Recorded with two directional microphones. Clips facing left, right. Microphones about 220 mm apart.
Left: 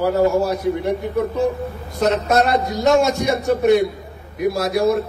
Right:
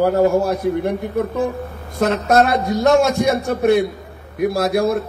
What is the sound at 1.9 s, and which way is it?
A man's voice, 55° right (ahead or behind).